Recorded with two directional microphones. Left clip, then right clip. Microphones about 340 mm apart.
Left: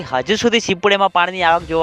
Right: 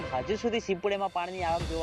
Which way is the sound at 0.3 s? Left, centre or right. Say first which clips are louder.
Left 16 dB; left.